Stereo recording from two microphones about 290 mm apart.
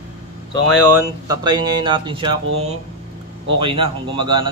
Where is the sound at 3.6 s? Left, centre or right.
Centre.